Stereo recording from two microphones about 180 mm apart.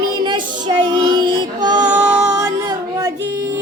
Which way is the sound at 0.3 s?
25° right (ahead or behind).